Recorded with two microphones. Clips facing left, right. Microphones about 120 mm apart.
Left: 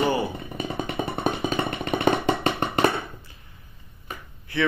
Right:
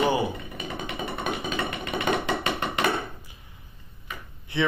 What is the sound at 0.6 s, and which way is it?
Music, 35° left (ahead or behind).